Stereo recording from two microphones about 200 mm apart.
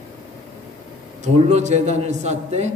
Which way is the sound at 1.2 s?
35° right (ahead or behind).